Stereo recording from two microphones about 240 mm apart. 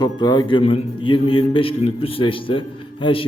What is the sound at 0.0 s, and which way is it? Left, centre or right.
A man's voice, centre.